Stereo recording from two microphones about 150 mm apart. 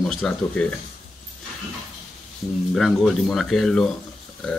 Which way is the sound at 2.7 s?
Centre (ahead or behind).